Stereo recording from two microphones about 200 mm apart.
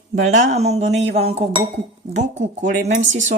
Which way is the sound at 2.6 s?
40° right (ahead or behind).